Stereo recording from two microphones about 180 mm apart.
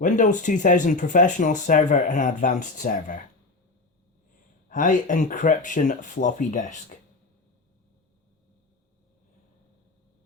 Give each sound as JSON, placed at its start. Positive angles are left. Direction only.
{"t": 0.0, "sound": "speech", "side_deg": 45}
{"t": 4.7, "sound": "speech", "side_deg": 45}